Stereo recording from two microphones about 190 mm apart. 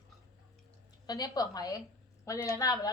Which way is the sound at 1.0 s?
20° left (ahead or behind).